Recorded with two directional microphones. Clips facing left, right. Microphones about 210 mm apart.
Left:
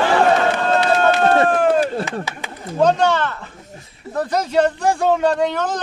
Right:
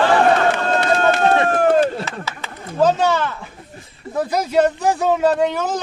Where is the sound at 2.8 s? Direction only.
5° right (ahead or behind).